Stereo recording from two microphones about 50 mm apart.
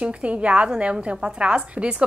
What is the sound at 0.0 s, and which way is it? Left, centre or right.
A woman's voice, right.